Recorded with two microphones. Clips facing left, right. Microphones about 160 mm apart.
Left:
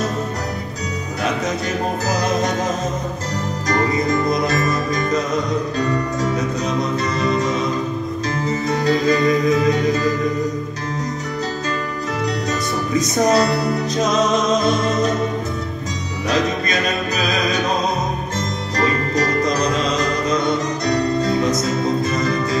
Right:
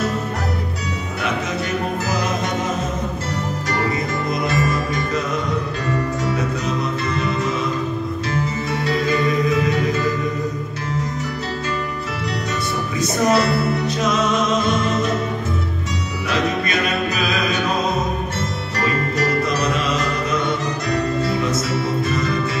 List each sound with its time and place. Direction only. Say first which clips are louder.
3.9 s music: left 4 dB; 40° left (ahead or behind)
7.2 s music: left 4 dB; 40° left (ahead or behind)
8.6 s music: left 6 dB; 40° left (ahead or behind)
12.9 s music: left 2 dB; 40° left (ahead or behind)
16.3 s music: left 2 dB; 40° left (ahead or behind)
18.8 s music: left 2 dB; 40° left (ahead or behind)